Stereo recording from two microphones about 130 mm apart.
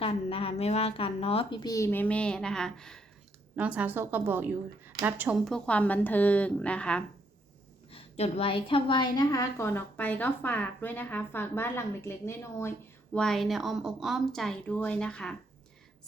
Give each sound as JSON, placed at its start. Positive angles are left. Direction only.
{"t": 0.0, "sound": "a woman's voice", "side_deg": 45}
{"t": 3.5, "sound": "a woman's voice", "side_deg": -10}
{"t": 5.5, "sound": "a woman's voice", "side_deg": 5}
{"t": 7.9, "sound": "a woman's voice", "side_deg": 50}
{"t": 13.1, "sound": "a woman's voice", "side_deg": 0}